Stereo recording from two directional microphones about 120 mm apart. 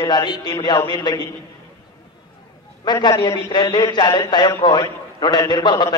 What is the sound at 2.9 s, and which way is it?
A man's voice, 35° left (ahead or behind).